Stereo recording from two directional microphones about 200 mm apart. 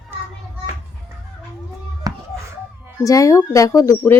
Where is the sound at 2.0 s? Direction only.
20° right (ahead or behind).